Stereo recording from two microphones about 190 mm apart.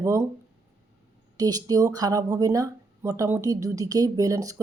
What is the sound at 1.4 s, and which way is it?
Speech, 20° right (ahead or behind).